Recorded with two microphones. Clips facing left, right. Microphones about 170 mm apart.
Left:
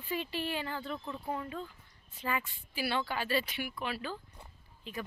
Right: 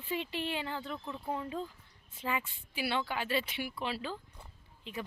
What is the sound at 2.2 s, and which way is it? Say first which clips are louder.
Speech: even; 20° right (ahead or behind).